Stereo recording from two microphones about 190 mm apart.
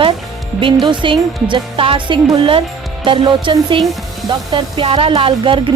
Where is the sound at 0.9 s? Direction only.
25° right (ahead or behind).